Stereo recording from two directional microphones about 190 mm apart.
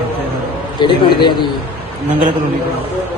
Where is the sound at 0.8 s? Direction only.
25° left (ahead or behind).